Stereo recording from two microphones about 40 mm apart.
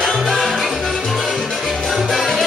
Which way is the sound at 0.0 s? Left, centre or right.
Centre.